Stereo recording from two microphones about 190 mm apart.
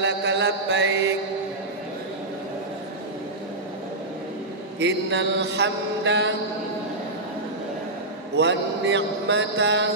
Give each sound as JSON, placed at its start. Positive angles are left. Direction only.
{"t": 0.0, "sound": "chant", "side_deg": -70}
{"t": 4.7, "sound": "mantra", "side_deg": -70}
{"t": 8.4, "sound": "mantra", "side_deg": -70}